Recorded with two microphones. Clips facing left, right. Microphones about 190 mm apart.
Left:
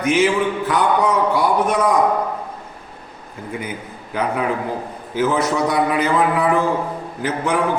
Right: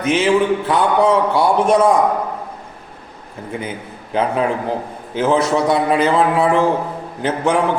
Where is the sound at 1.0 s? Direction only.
25° right (ahead or behind).